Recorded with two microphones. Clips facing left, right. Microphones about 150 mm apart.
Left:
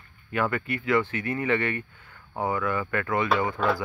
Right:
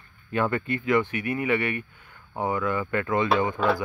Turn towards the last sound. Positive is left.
turn(degrees=-20)  # may be behind; listen again after turning